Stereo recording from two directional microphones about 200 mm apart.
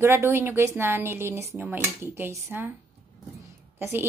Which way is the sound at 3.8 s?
10° right (ahead or behind).